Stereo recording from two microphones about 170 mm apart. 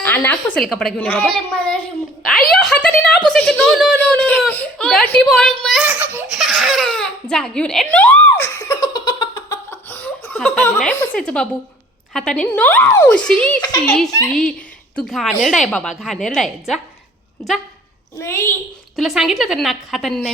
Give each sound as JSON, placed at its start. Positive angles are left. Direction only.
{"t": 0.0, "sound": "a woman's voice", "side_deg": 10}
{"t": 5.9, "sound": "laughter", "side_deg": -10}
{"t": 6.3, "sound": "baby laughter", "side_deg": 0}
{"t": 9.6, "sound": "a sound", "side_deg": 10}
{"t": 12.1, "sound": "a woman's voice", "side_deg": 5}
{"t": 18.2, "sound": "a woman's voice", "side_deg": 15}
{"t": 18.9, "sound": "a woman's voice", "side_deg": 0}